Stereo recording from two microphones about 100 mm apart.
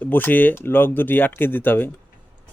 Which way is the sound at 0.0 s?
20° left (ahead or behind).